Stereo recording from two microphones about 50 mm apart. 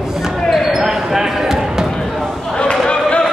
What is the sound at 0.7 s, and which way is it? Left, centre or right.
Basketball bounce, centre.